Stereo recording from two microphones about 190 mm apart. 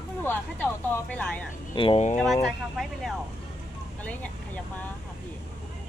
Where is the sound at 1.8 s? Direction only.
30° left (ahead or behind).